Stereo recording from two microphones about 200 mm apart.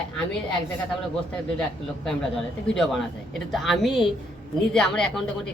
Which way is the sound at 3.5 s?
Centre (ahead or behind).